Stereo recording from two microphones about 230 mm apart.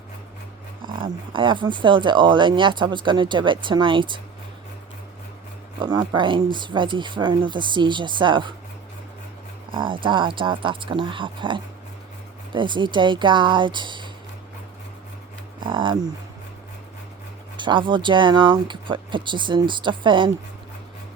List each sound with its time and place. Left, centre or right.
0.9 s speech: right
5.8 s speech: centre
9.7 s speech: right
15.6 s speech: right
17.6 s speech: right